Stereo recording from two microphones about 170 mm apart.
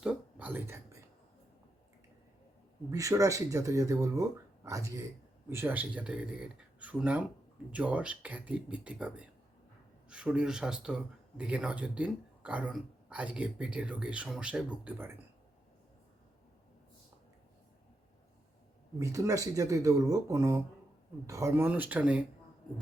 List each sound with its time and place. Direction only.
0.0 s a sound: 5° right (ahead or behind)
2.9 s speech: 20° right (ahead or behind)
18.9 s speech: 20° right (ahead or behind)